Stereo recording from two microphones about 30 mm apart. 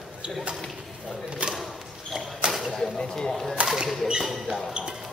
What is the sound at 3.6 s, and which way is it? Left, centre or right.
Speech, right.